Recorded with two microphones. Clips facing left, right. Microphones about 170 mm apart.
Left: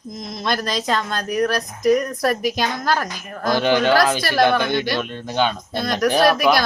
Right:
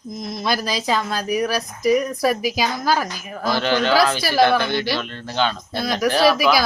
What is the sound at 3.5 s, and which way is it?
Speech, 15° left (ahead or behind).